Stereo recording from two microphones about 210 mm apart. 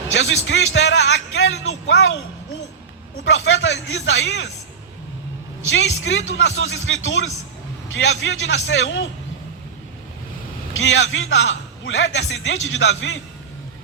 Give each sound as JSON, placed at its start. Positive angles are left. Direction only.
{"t": 0.1, "sound": "speech", "side_deg": 60}
{"t": 3.2, "sound": "a man's voice", "side_deg": 65}
{"t": 5.6, "sound": "a man's voice", "side_deg": 65}
{"t": 10.8, "sound": "a man's voice", "side_deg": 65}